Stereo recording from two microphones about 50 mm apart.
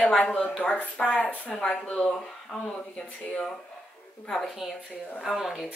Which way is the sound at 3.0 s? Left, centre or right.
Centre.